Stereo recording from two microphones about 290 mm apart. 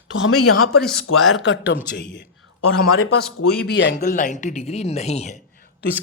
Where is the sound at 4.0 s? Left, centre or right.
Left.